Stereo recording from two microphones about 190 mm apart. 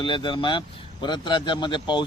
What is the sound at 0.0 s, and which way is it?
Speech, 25° left (ahead or behind).